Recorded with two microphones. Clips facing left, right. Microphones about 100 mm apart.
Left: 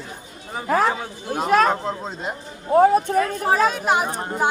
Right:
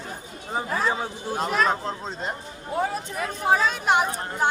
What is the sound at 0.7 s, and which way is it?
A man's voice, 70° left (ahead or behind).